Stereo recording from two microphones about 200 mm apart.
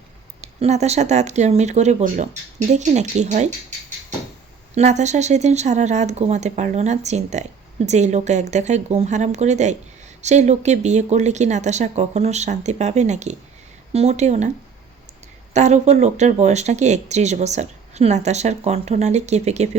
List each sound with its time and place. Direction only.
0.4 s speech: 35° right (ahead or behind)
15.5 s speech: 35° right (ahead or behind)